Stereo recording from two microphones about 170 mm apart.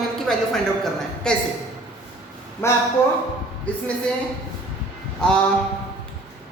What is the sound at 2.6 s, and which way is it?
Speech, 15° left (ahead or behind).